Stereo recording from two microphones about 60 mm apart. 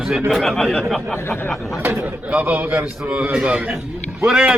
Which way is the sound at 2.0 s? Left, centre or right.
Centre.